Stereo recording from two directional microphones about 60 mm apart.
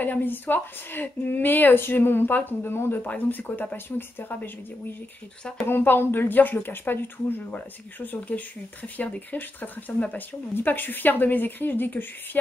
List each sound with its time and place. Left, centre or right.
0.0 s a woman's voice: left